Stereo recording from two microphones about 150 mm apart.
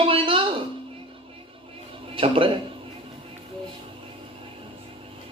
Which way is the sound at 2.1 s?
35° right (ahead or behind).